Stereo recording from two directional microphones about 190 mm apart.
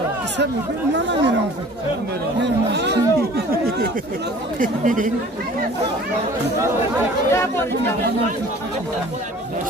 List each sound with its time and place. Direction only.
0.9 s speech: 70° right (ahead or behind)
2.4 s speech: 65° right (ahead or behind)
4.6 s speech: 45° right (ahead or behind)
7.2 s speech: 15° left (ahead or behind)